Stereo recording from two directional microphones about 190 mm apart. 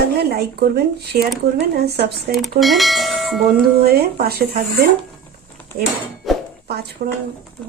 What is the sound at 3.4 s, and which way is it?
Speech, 50° right (ahead or behind).